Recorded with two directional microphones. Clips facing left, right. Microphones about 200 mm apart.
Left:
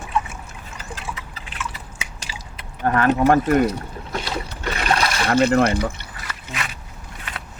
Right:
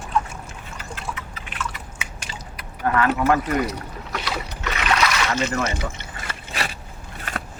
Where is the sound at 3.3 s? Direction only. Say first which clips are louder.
Left 5 dB; 50° left (ahead or behind).